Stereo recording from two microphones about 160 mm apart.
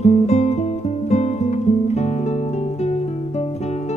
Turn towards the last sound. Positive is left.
turn(degrees=45)  # may be behind; listen again after turning